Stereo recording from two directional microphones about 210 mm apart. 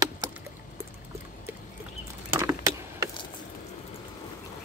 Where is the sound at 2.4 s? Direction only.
10° right (ahead or behind).